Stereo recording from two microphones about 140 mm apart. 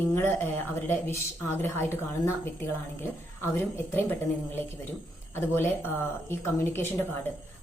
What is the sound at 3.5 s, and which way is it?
Speech, 15° left (ahead or behind).